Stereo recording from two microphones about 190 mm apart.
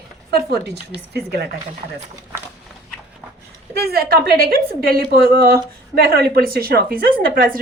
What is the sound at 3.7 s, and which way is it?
A woman's voice, 55° right (ahead or behind).